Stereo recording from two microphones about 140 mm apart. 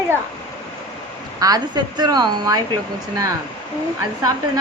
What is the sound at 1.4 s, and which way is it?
A woman's voice, 25° right (ahead or behind).